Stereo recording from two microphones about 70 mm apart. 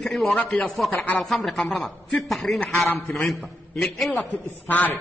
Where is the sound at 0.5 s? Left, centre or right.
Centre.